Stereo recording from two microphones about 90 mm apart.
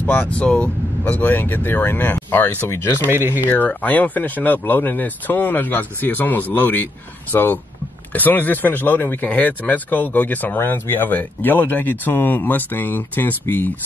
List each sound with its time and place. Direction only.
0.0 s speech: 20° left (ahead or behind)
3.1 s speech: 25° right (ahead or behind)
3.4 s speech: 15° left (ahead or behind)